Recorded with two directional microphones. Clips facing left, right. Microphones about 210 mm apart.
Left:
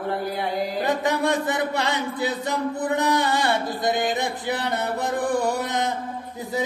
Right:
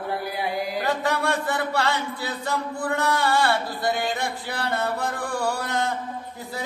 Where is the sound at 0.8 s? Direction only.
20° left (ahead or behind).